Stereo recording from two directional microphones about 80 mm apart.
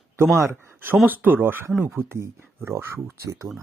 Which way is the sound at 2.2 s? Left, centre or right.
Right.